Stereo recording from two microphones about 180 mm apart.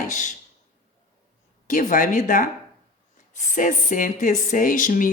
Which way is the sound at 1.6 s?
45° left (ahead or behind).